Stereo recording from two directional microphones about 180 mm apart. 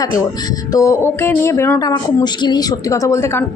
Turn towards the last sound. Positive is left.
turn(degrees=15)  # may be behind; listen again after turning